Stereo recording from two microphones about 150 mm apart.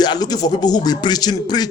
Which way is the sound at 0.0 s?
25° left (ahead or behind).